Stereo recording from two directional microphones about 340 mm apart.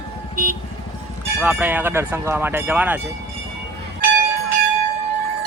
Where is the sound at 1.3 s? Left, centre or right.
Centre.